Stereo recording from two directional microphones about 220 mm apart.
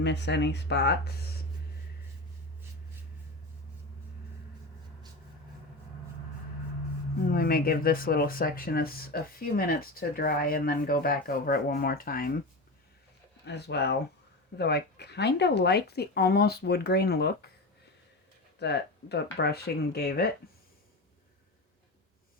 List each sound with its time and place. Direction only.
0.0 s speech: 50° left (ahead or behind)
7.3 s speech: 40° left (ahead or behind)
13.4 s speech: 50° left (ahead or behind)
18.6 s speech: 50° left (ahead or behind)